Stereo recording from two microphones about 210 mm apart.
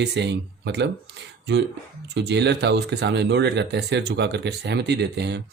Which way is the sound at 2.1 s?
55° right (ahead or behind).